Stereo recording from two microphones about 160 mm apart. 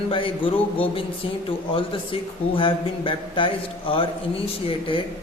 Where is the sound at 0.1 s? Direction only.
30° left (ahead or behind).